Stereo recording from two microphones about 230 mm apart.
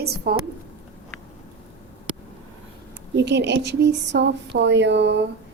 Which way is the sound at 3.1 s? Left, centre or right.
Right.